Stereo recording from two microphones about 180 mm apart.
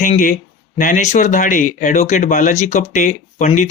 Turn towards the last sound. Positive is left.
turn(degrees=40)  # may be behind; listen again after turning